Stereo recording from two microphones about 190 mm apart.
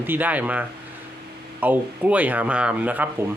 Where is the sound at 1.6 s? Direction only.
10° right (ahead or behind).